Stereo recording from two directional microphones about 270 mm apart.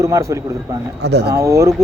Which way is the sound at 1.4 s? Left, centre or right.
Centre.